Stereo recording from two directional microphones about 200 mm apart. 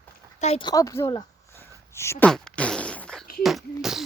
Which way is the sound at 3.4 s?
Centre (ahead or behind).